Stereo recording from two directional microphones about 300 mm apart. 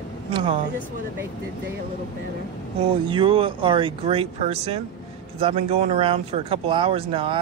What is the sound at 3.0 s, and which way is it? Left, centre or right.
Speech, centre.